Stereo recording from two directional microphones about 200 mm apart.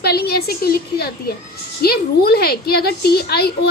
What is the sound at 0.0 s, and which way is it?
A woman's voice, 50° left (ahead or behind).